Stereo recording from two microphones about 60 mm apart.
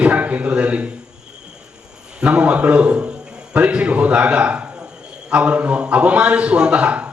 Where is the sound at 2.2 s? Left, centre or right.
Right.